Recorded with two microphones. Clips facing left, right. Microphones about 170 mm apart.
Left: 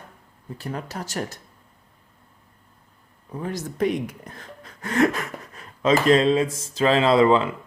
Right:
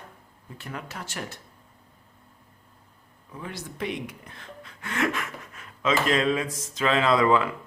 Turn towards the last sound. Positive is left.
turn(degrees=25)  # may be behind; listen again after turning